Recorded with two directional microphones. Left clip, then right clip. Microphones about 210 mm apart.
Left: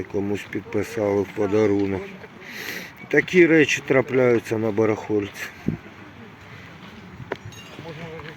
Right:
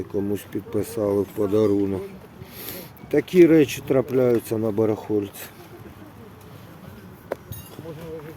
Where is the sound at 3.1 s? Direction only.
10° right (ahead or behind).